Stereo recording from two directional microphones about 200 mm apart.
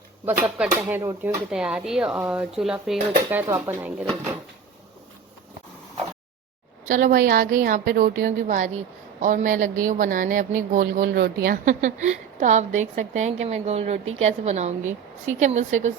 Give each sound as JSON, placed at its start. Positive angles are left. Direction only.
{"t": 0.3, "sound": "speech", "side_deg": -5}
{"t": 6.8, "sound": "a woman's voice", "side_deg": -40}